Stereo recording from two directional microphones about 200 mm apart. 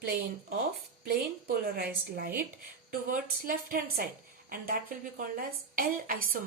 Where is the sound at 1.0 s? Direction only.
50° right (ahead or behind).